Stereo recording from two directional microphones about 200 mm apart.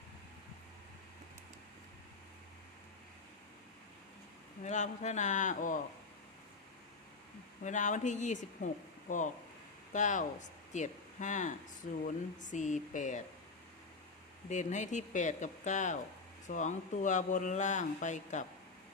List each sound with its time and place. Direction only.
4.6 s speech: 35° left (ahead or behind)
7.6 s speech: 40° left (ahead or behind)
14.5 s speech: 35° left (ahead or behind)